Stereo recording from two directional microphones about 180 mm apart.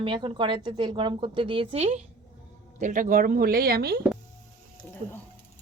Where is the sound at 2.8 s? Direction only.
50° right (ahead or behind).